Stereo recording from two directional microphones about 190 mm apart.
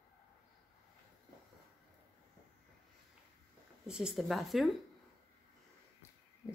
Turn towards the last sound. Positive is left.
turn(degrees=0)  # may be behind; listen again after turning